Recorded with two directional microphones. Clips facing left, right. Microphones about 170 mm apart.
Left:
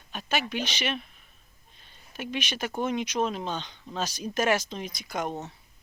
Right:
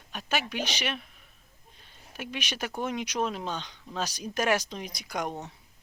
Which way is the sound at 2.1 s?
10° right (ahead or behind).